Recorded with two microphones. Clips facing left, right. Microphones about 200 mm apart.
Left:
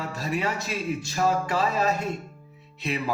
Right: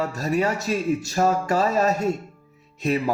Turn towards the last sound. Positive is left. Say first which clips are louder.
# right 6 dB
turn(degrees=-45)  # may be behind; listen again after turning